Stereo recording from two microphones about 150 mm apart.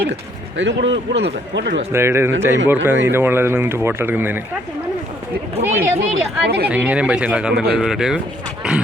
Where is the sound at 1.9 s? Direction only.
15° right (ahead or behind).